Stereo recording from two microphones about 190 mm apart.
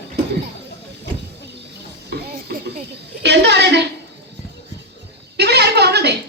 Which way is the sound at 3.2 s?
60° right (ahead or behind).